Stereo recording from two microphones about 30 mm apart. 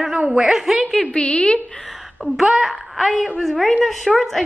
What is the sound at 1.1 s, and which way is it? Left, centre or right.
Speech, left.